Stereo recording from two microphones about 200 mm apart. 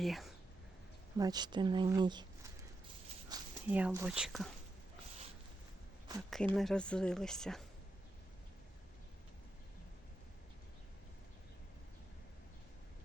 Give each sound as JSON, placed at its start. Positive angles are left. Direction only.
{"t": 0.0, "sound": "speech", "side_deg": 0}
{"t": 1.2, "sound": "speech", "side_deg": -20}
{"t": 3.3, "sound": "a sound", "side_deg": -20}
{"t": 3.7, "sound": "speech", "side_deg": -10}
{"t": 6.5, "sound": "speech", "side_deg": 5}